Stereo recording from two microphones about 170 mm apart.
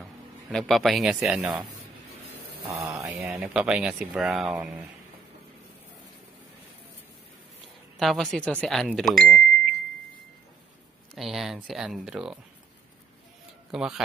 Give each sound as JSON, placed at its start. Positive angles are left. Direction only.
{"t": 0.5, "sound": "speech", "side_deg": 5}
{"t": 2.3, "sound": "a sound", "side_deg": -20}
{"t": 3.0, "sound": "speech", "side_deg": 0}
{"t": 8.0, "sound": "speech", "side_deg": 0}
{"t": 11.1, "sound": "speech", "side_deg": 0}
{"t": 13.7, "sound": "speech", "side_deg": -5}